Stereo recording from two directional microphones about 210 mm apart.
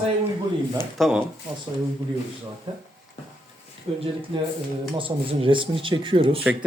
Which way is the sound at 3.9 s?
30° right (ahead or behind).